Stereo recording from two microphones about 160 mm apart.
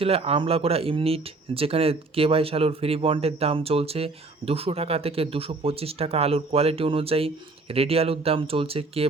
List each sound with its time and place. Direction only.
0.0 s speech: 35° right (ahead or behind)